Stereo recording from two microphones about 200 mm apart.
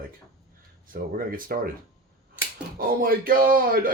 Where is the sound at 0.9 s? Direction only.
45° right (ahead or behind).